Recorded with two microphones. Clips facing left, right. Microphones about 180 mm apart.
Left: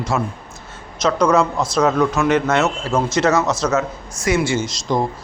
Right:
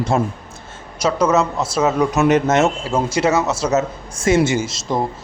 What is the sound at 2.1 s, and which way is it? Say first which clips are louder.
Speech: right 2 dB; 20° right (ahead or behind).